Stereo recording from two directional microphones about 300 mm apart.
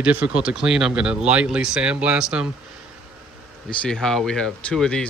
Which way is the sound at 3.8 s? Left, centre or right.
Centre.